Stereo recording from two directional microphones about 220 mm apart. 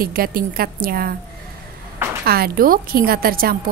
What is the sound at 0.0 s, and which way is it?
A woman's voice, 40° right (ahead or behind).